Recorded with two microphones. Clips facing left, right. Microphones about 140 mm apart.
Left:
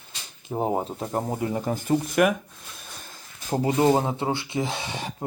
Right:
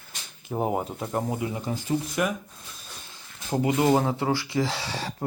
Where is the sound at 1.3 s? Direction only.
45° left (ahead or behind); by 2.4 s 65° left (ahead or behind).